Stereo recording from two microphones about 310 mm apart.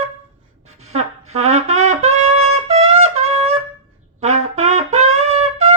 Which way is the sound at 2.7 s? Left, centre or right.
Right.